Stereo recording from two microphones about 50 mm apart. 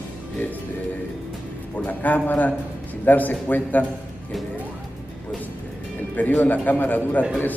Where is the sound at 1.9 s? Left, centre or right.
Left.